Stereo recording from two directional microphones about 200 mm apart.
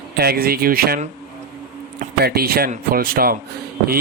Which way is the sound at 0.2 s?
50° right (ahead or behind).